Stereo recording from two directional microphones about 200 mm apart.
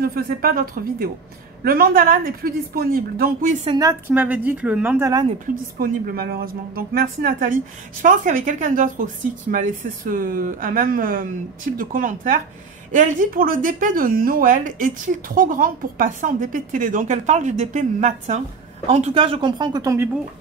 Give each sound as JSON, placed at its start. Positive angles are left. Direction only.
{"t": 0.0, "sound": "speech", "side_deg": -50}
{"t": 3.6, "sound": "speech", "side_deg": -20}
{"t": 4.1, "sound": "speech", "side_deg": -10}
{"t": 5.8, "sound": "a woman's voice", "side_deg": -50}